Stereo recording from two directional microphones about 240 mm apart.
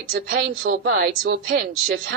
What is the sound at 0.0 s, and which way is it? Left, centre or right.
Speech, right.